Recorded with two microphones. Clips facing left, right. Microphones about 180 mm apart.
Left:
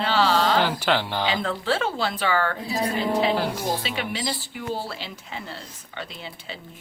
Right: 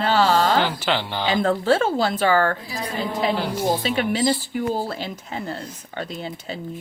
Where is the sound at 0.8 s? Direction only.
5° left (ahead or behind).